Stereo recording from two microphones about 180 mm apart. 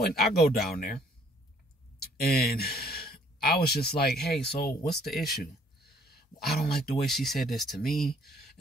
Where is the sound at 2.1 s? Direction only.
60° left (ahead or behind).